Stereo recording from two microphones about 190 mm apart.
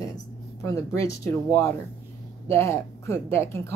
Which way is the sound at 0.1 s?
15° left (ahead or behind).